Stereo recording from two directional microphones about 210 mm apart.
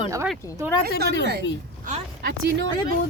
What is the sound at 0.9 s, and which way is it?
Speech, 55° right (ahead or behind).